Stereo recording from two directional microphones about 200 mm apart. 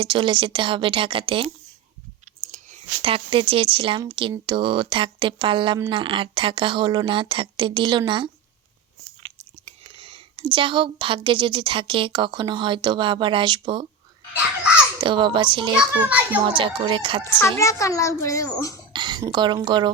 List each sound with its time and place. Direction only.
0.0 s a woman's voice: 25° right (ahead or behind)
2.4 s a woman's voice: 35° right (ahead or behind)
9.6 s a woman's voice: 30° right (ahead or behind)
15.0 s a woman's voice: 25° right (ahead or behind)
15.7 s a child's voice: 5° right (ahead or behind)
16.5 s a woman's voice: 25° right (ahead or behind)
17.6 s a child's voice: 15° left (ahead or behind)
18.9 s a woman's voice: 20° right (ahead or behind)